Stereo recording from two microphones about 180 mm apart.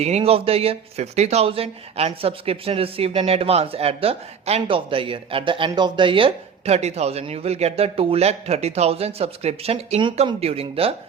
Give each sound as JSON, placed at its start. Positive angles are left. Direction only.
{"t": 0.0, "sound": "speech", "side_deg": -35}